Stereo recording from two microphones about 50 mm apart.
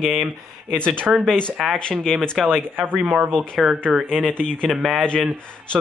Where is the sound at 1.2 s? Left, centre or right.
Centre.